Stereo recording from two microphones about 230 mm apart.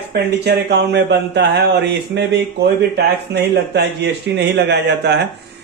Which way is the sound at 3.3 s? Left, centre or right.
Right.